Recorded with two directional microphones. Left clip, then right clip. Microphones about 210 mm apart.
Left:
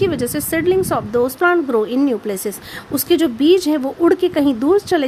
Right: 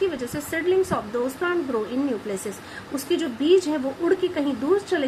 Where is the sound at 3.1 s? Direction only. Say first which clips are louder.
Left 7 dB; 55° left (ahead or behind).